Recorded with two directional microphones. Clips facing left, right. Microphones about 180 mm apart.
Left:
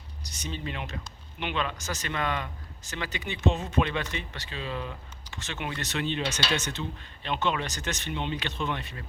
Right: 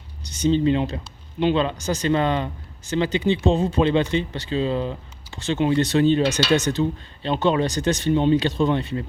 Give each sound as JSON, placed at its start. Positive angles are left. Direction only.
{"t": 0.3, "sound": "speech", "side_deg": -30}